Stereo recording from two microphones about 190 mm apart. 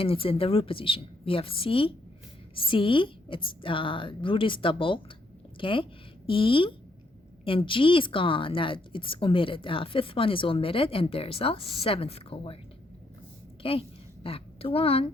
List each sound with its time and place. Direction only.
0.0 s a woman's voice: 30° left (ahead or behind)
13.6 s a woman's voice: 30° left (ahead or behind)